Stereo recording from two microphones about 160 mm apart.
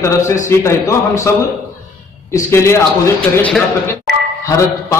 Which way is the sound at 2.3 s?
15° left (ahead or behind).